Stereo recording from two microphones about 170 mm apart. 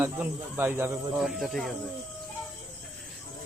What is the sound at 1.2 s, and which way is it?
Speech, centre (ahead or behind).